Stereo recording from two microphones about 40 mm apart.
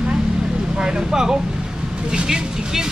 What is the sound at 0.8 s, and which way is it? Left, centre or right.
Speech, right.